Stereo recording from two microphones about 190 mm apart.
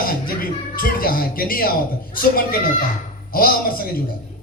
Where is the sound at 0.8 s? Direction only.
50° left (ahead or behind).